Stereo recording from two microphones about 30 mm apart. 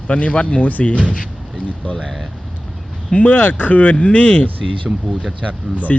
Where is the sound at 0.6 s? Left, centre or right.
Left.